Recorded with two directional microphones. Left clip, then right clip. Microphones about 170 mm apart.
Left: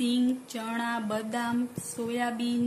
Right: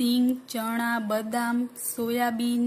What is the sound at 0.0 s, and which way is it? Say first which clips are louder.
Music: right 3 dB; 35° right (ahead or behind).